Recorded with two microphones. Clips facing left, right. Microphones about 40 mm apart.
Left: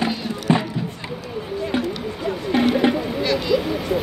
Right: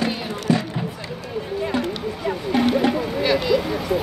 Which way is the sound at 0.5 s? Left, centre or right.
Left.